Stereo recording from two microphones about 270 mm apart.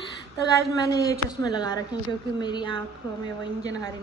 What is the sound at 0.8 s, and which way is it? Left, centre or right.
A woman's voice, centre.